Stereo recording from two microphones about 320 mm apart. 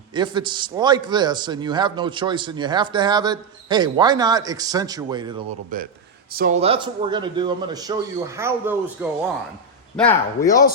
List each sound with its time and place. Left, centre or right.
0.1 s a man's voice: centre
5.7 s a man's voice: right; by 9.0 s centre
10.0 s speech: centre